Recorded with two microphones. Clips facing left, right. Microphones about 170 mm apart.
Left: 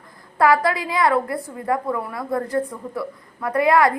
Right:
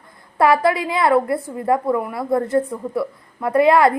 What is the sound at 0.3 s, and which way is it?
A woman's voice, 25° right (ahead or behind).